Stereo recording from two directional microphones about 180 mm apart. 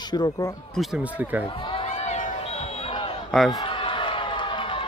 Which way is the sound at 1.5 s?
30° left (ahead or behind).